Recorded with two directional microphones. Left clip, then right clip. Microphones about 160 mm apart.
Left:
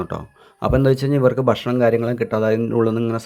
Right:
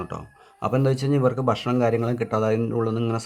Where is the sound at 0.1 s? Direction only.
25° left (ahead or behind).